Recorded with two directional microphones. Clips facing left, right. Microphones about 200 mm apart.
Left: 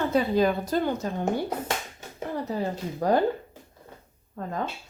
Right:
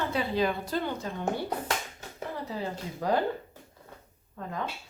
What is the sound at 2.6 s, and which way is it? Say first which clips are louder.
Speech: left 5 dB; 45° left (ahead or behind).